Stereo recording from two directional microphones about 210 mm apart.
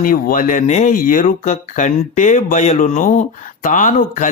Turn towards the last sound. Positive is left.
turn(degrees=35)  # may be behind; listen again after turning